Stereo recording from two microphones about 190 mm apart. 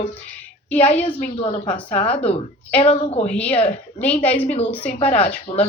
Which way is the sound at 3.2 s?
5° left (ahead or behind).